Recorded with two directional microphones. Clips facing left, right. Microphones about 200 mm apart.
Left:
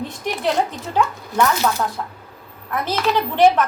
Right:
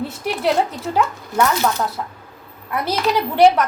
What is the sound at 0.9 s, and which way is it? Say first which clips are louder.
A woman's voice: even; 10° right (ahead or behind).